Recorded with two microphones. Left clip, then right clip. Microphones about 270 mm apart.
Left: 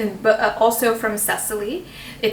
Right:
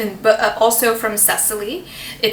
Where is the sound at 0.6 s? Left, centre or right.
Centre.